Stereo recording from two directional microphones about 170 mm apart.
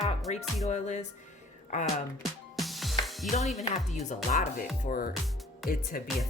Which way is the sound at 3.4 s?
Centre (ahead or behind).